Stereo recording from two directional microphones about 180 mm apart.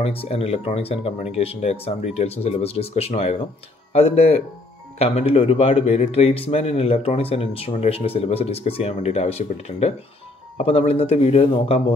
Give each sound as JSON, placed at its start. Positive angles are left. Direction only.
{"t": 0.0, "sound": "speech", "side_deg": 35}